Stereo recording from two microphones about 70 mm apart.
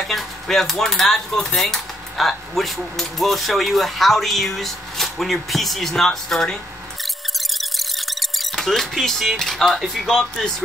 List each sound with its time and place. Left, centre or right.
0.0 s speech: centre
7.3 s music: centre